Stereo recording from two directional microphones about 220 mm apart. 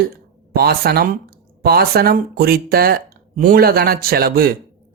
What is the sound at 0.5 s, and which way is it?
A man's voice, 45° right (ahead or behind).